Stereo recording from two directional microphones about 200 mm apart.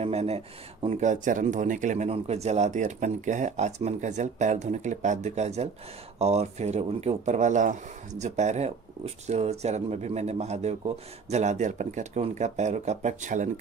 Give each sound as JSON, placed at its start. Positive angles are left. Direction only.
{"t": 0.0, "sound": "speech", "side_deg": -30}